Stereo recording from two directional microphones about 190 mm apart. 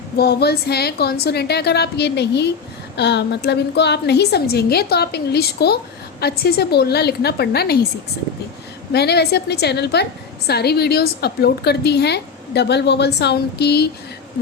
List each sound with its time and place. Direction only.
0.2 s a woman's voice: 55° left (ahead or behind)
8.9 s a woman's voice: 60° left (ahead or behind)